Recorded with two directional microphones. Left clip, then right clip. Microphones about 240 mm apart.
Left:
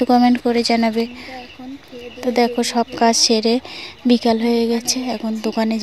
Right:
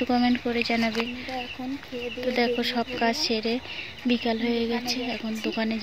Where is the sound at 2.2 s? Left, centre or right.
Left.